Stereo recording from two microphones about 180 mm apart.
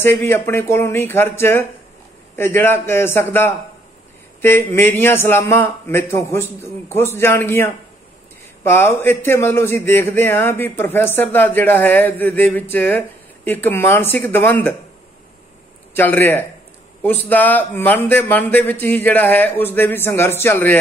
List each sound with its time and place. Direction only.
0.0 s a man's voice: 15° left (ahead or behind)
15.9 s a man's voice: 10° left (ahead or behind)